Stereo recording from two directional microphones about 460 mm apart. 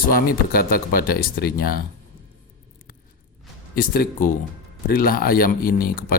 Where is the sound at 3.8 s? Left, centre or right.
Centre.